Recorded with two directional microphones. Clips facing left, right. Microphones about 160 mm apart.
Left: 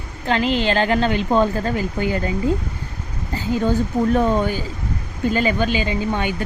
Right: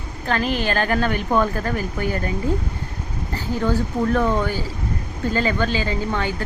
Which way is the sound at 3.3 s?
20° left (ahead or behind).